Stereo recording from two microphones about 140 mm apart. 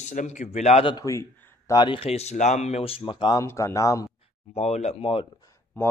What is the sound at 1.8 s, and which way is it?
Speech, 40° left (ahead or behind).